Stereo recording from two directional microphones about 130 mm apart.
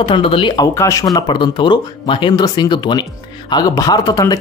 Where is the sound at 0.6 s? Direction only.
25° left (ahead or behind).